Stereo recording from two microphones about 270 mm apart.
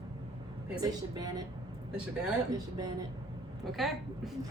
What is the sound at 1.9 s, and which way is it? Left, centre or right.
Speech, centre.